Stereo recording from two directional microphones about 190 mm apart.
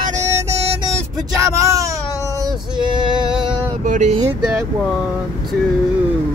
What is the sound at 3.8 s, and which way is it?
Vehicle, 40° right (ahead or behind).